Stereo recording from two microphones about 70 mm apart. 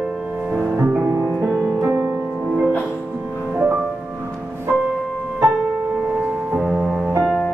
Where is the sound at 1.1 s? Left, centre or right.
Right.